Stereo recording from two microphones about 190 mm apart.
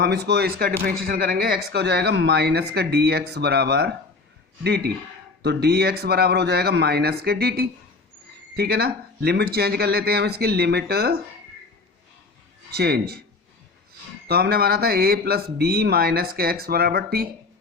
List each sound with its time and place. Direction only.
0.0 s speech: 60° right (ahead or behind)
12.7 s speech: 55° right (ahead or behind)
14.3 s speech: 55° right (ahead or behind)